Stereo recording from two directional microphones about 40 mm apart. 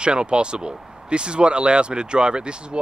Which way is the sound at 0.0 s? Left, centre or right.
Right.